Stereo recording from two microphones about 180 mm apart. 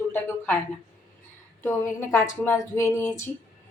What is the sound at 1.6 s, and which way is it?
Speech, 15° left (ahead or behind).